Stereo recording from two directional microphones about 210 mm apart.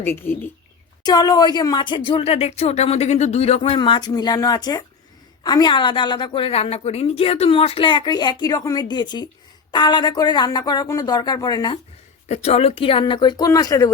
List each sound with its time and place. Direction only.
0.0 s a woman's voice: 10° left (ahead or behind)
12.3 s a woman's voice: 30° left (ahead or behind)